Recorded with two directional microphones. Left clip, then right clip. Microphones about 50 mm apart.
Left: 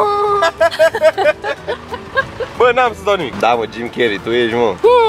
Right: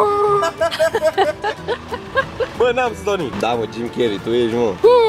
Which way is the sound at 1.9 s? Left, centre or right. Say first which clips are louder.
Left 2 dB; centre.